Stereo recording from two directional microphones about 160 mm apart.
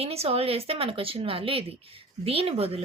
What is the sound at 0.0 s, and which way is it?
Speech, 40° right (ahead or behind).